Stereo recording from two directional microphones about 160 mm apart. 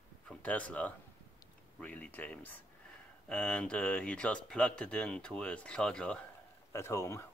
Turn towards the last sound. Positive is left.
turn(degrees=15)  # may be behind; listen again after turning